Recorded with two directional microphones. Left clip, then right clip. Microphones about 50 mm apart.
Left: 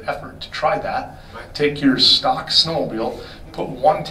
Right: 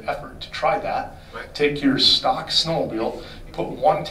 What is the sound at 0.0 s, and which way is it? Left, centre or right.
Speech, centre.